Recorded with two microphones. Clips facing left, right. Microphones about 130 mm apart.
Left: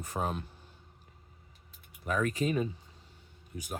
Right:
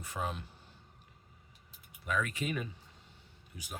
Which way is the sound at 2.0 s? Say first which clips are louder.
Left 5 dB; 40° left (ahead or behind).